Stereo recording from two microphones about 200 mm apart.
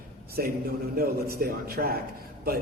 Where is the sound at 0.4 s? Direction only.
50° right (ahead or behind).